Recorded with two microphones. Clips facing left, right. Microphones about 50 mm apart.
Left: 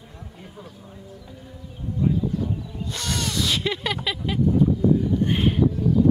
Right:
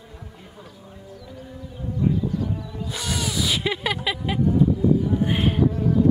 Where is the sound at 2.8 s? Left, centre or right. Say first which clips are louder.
Right 1 dB; centre.